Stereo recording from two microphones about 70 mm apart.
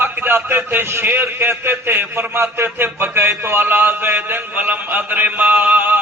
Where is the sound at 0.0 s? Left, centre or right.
Right.